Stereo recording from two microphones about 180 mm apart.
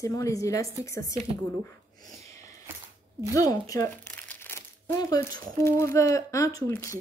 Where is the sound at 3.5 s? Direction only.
20° left (ahead or behind).